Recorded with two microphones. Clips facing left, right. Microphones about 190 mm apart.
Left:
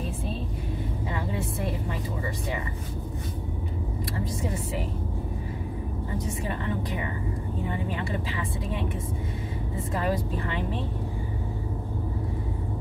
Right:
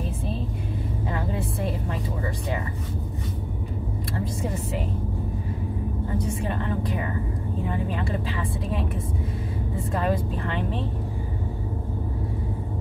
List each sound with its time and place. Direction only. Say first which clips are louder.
1.1 s a sound: right 2 dB; centre (ahead or behind)
6.4 s speech: right 3 dB; centre (ahead or behind)
9.9 s speech: right 2 dB; 5° left (ahead or behind)